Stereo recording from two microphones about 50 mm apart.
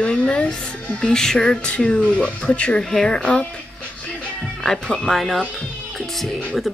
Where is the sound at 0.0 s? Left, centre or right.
Left.